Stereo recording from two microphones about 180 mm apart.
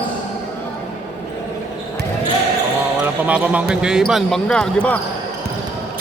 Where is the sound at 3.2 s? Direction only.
5° right (ahead or behind).